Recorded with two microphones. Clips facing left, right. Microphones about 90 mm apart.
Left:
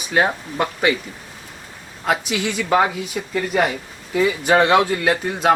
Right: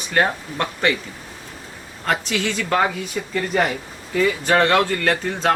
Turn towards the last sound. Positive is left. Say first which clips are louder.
# left 2 dB
turn(degrees=10)  # may be behind; listen again after turning